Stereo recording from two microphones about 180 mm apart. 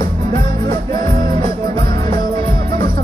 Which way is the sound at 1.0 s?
50° right (ahead or behind).